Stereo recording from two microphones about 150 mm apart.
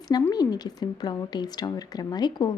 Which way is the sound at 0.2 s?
20° left (ahead or behind).